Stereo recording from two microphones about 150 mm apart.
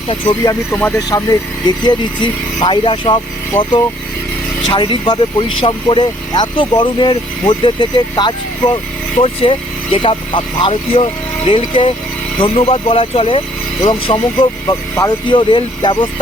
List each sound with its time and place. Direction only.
0.1 s speech: 30° left (ahead or behind)
0.7 s speech: 10° left (ahead or behind)
1.1 s speech: 25° left (ahead or behind)
4.7 s speech: 30° left (ahead or behind)